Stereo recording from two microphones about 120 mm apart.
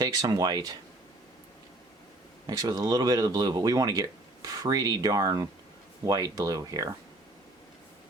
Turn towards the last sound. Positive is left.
turn(degrees=-30)  # may be behind; listen again after turning